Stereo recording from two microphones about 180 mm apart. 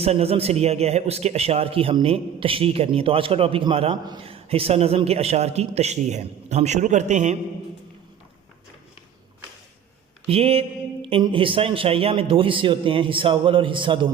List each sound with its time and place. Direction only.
0.0 s a man's voice: 35° right (ahead or behind)
10.2 s speech: 35° right (ahead or behind)